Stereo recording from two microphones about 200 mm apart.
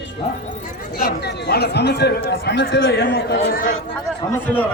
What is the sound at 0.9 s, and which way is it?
Speech, 55° left (ahead or behind).